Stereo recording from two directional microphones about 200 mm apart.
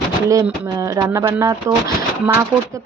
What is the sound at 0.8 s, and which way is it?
Speech, 15° right (ahead or behind).